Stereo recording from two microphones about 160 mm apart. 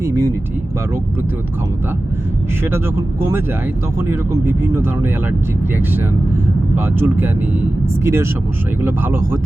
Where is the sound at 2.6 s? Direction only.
15° right (ahead or behind).